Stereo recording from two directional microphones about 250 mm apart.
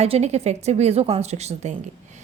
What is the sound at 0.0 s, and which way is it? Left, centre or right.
A woman's voice, right.